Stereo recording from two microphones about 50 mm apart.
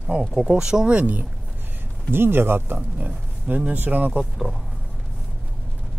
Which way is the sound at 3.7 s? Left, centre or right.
Right.